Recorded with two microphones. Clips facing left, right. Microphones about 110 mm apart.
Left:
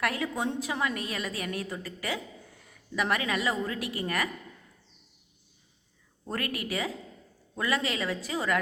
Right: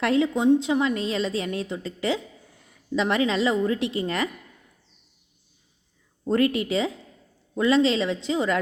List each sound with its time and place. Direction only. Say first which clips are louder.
0.0 s a woman's voice: right 9 dB; 25° right (ahead or behind)
6.2 s a woman's voice: right 12 dB; 25° right (ahead or behind)